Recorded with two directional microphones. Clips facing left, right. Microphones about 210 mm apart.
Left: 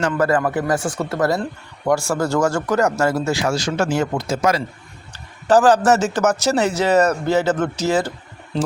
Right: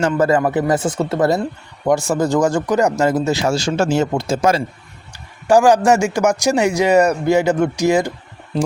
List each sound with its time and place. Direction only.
0.0 s a man's voice: 25° right (ahead or behind)
5.1 s a man's voice: 10° right (ahead or behind)